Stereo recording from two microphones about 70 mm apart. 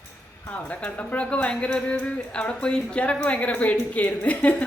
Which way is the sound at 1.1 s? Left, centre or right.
Centre.